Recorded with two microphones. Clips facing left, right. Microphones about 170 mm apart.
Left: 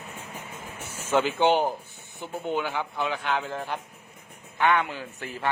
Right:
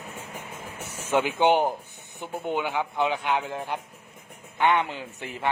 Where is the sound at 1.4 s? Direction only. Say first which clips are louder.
Right 1 dB; 15° right (ahead or behind).